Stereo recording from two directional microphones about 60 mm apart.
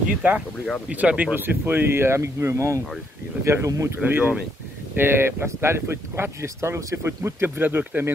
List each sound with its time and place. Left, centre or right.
0.2 s speech: right
1.3 s speech: right
4.0 s speech: right
4.9 s speech: right